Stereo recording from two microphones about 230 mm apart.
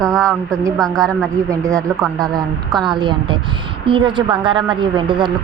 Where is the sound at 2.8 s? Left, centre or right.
Centre.